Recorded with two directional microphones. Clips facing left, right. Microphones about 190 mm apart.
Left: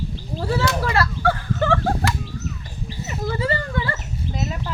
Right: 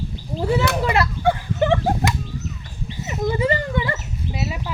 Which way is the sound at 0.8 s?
20° right (ahead or behind).